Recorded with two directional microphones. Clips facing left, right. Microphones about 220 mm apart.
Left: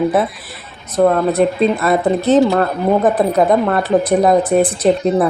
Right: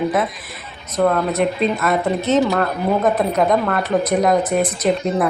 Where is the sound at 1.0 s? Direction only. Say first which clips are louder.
Left 4 dB; 30° left (ahead or behind).